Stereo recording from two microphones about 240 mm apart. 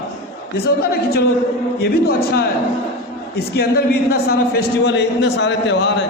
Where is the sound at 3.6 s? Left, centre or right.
Left.